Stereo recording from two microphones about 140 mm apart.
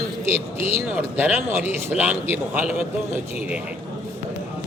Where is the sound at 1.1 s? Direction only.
15° right (ahead or behind).